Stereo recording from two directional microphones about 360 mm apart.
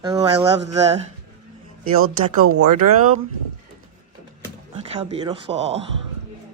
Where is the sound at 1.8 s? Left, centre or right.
Right.